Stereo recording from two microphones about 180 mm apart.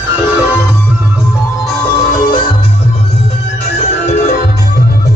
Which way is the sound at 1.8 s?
25° left (ahead or behind).